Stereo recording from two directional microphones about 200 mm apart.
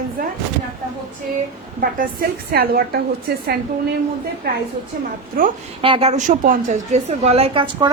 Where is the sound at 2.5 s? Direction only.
50° right (ahead or behind).